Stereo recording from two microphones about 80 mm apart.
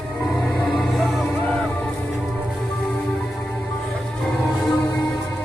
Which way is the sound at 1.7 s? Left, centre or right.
Centre.